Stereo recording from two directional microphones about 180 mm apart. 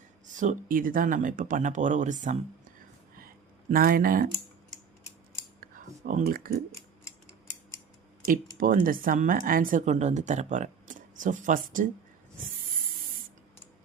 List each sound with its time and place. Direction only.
0.3 s speech: 45° right (ahead or behind)
3.7 s speech: 55° right (ahead or behind)
6.1 s speech: 55° right (ahead or behind)
8.3 s speech: 50° right (ahead or behind)